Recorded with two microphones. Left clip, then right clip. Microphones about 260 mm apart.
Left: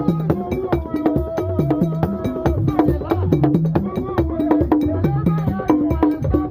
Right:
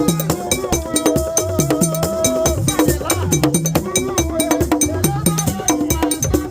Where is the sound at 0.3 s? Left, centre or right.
Right.